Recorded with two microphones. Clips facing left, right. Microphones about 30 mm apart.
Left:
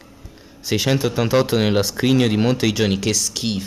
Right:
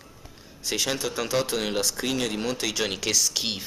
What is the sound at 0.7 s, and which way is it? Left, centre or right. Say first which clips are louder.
Speech: left 8 dB; centre.